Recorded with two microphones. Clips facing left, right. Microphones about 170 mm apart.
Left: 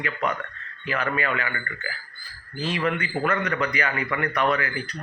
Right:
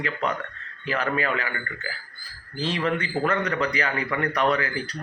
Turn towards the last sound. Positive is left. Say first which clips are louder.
# right 1 dB
turn(degrees=-35)  # may be behind; listen again after turning